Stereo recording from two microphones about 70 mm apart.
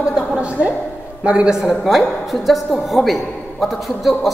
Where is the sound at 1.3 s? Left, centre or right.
Centre.